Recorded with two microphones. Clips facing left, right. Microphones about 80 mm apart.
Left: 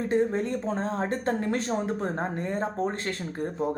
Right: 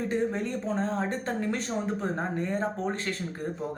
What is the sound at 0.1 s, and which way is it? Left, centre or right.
Speech, left.